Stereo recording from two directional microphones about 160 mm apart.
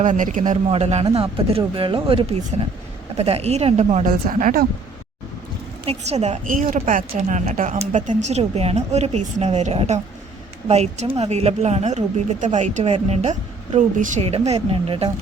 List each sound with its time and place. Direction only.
0.0 s speech: 55° right (ahead or behind)
5.8 s speech: 40° right (ahead or behind)